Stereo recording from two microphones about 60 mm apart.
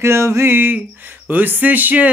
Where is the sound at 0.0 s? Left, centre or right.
Right.